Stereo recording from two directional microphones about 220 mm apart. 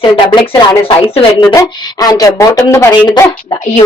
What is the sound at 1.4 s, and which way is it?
A woman's voice, 15° left (ahead or behind).